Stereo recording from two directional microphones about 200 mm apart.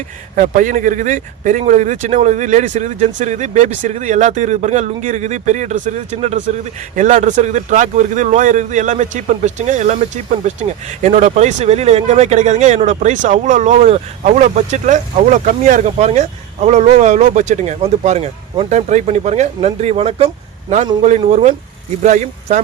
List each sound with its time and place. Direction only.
0.3 s a man's voice: 40° right (ahead or behind)